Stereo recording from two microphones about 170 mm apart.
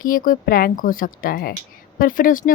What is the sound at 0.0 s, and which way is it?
Speech, 55° left (ahead or behind).